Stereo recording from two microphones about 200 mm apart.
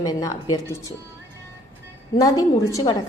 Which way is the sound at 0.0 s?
15° left (ahead or behind).